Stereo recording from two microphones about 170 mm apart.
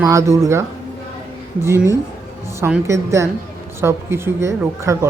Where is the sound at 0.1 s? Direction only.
20° right (ahead or behind).